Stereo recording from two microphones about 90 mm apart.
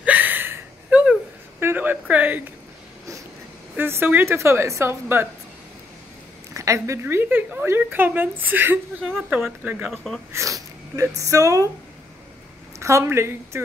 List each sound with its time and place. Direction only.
0.0 s a sound: 20° right (ahead or behind)
3.7 s a woman's voice: 25° right (ahead or behind)
6.5 s a woman's voice: 35° right (ahead or behind); by 9.9 s 15° right (ahead or behind)
10.3 s speech: 35° right (ahead or behind)
12.7 s a woman's voice: 35° right (ahead or behind)